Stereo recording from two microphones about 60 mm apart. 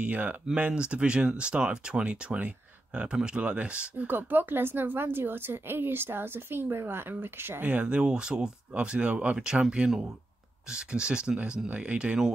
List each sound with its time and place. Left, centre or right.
0.0 s speech: right
4.1 s a woman's voice: right
7.7 s speech: centre